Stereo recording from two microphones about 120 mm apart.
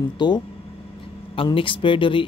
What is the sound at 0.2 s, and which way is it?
Speech, 40° left (ahead or behind).